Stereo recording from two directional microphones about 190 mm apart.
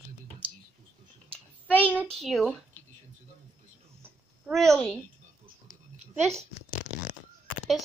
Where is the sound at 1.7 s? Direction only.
10° left (ahead or behind).